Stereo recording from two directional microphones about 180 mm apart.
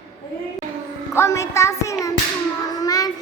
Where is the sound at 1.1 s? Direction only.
15° left (ahead or behind).